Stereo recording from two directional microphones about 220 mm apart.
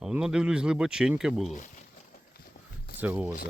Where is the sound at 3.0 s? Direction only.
5° right (ahead or behind).